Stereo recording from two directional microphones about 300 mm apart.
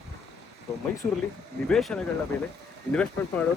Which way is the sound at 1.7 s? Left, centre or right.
Centre.